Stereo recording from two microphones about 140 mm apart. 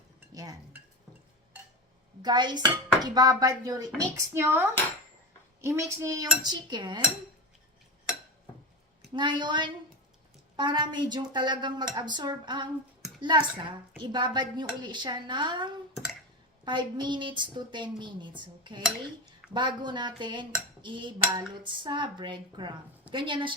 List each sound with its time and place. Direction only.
2.2 s speech: 30° right (ahead or behind)
9.1 s a woman's voice: 35° right (ahead or behind)